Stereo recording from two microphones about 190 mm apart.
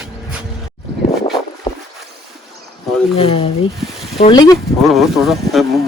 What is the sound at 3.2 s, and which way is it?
Speech, 30° left (ahead or behind).